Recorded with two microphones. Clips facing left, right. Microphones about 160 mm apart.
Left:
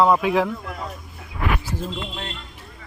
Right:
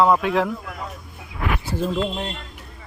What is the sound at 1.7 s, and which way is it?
Speech, 30° right (ahead or behind).